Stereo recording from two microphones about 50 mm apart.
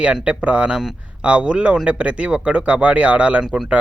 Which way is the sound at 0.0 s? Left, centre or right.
Right.